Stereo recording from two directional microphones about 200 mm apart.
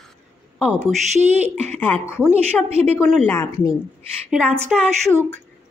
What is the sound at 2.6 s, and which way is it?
Speech, 30° right (ahead or behind).